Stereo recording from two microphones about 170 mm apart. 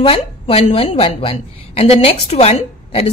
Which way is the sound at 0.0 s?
35° left (ahead or behind).